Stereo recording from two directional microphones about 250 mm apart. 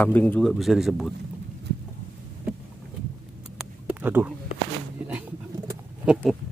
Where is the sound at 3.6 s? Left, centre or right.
Centre.